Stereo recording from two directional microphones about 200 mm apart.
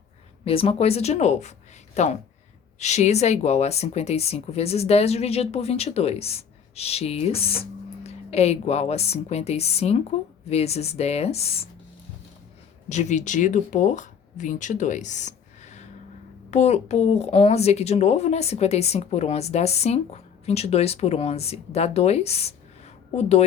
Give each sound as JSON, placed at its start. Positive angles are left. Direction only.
{"t": 0.4, "sound": "speech", "side_deg": 30}
{"t": 12.9, "sound": "speech", "side_deg": 35}